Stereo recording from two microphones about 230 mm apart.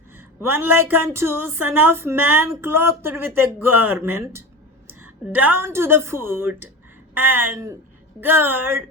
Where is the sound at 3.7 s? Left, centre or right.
Right.